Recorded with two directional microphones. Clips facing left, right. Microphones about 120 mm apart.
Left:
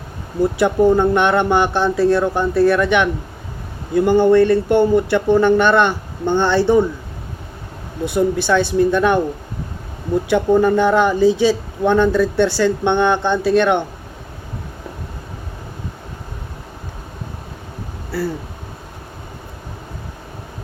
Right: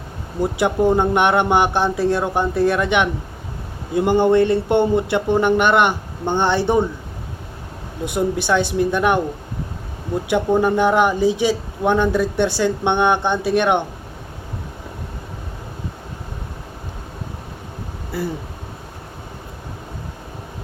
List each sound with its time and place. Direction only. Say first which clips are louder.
0.5 s speech: left 2 dB; 20° right (ahead or behind)
8.0 s speech: left 3 dB; 15° right (ahead or behind)
10.2 s speech: left 3 dB; 15° right (ahead or behind)